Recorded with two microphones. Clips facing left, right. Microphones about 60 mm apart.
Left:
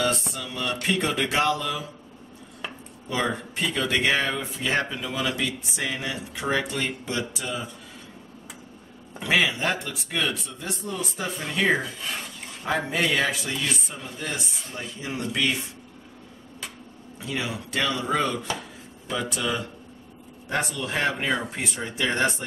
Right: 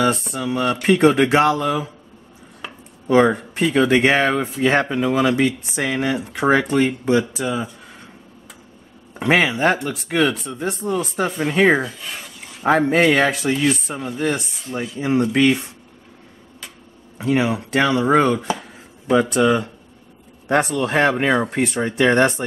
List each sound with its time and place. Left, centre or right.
0.1 s speech: right
2.6 s a sound: centre
3.1 s speech: right
3.5 s speech: right
6.8 s speech: right
9.2 s speech: right
12.9 s speech: right
17.2 s speech: right